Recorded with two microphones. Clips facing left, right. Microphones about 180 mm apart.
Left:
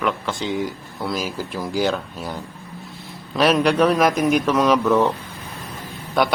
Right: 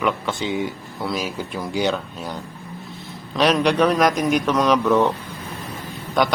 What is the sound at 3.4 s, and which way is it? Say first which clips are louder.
Speech: left 1 dB; 5° left (ahead or behind).